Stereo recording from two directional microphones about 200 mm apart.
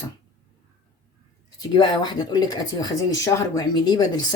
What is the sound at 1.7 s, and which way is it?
Speech, 20° left (ahead or behind).